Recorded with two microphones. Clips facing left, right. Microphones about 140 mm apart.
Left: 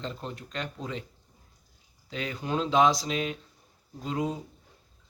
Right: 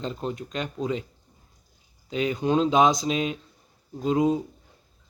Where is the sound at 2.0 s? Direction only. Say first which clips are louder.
Right 8 dB; 20° right (ahead or behind).